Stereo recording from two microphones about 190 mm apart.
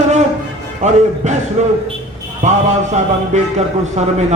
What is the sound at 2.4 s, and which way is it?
Speech, 40° right (ahead or behind).